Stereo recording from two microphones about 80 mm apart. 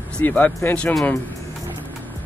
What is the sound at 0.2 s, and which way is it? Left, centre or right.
Speech, left.